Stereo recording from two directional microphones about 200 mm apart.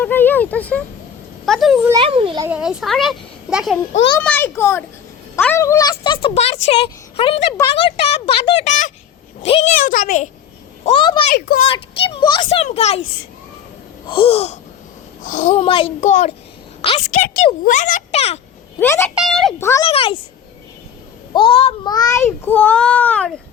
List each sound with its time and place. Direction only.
0.0 s a child's voice: 10° left (ahead or behind)
1.9 s a child's voice: 25° right (ahead or behind)
2.4 s a child's voice: 5° right (ahead or behind); by 10.2 s 40° left (ahead or behind)
10.8 s speech: 25° left (ahead or behind)
11.3 s speech: 50° left (ahead or behind)
11.6 s speech: 25° left (ahead or behind)
14.1 s a child's voice: 30° left (ahead or behind)
16.0 s a child's voice: 40° left (ahead or behind)
18.8 s a child's voice: 10° left (ahead or behind)
19.1 s a child's voice: centre (ahead or behind)
19.5 s a child's voice: 15° left (ahead or behind)
19.8 s speech: 25° left (ahead or behind)
21.3 s speech: 25° left (ahead or behind)
21.9 s a child's voice: 15° left (ahead or behind)